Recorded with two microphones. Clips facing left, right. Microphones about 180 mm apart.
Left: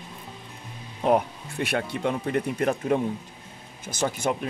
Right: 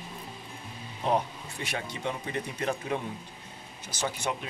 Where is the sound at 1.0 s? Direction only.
60° left (ahead or behind).